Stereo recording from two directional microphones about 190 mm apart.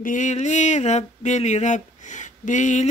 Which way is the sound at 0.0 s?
40° left (ahead or behind).